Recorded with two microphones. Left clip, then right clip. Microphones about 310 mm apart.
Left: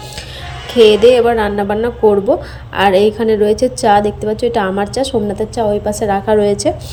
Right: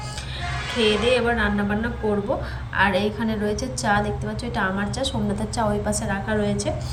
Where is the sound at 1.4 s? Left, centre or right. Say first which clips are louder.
Left 9 dB; centre.